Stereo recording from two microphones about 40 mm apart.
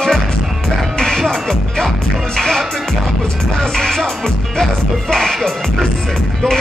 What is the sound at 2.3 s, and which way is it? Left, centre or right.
Speech, centre.